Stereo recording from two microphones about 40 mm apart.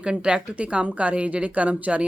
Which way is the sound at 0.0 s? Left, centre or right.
Right.